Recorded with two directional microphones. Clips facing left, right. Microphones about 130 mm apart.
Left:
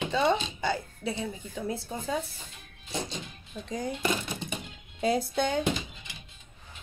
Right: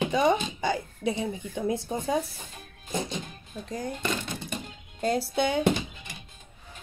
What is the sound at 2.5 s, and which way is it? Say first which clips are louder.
Music: right 4 dB; 45° right (ahead or behind).